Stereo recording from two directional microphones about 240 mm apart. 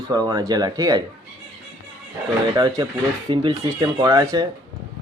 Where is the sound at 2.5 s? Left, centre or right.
Centre.